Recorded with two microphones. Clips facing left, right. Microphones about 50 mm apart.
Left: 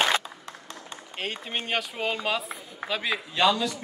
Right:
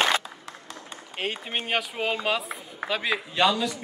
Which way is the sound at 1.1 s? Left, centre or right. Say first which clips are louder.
Right 2 dB; centre.